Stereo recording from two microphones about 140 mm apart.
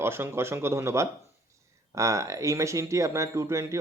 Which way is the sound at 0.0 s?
15° right (ahead or behind).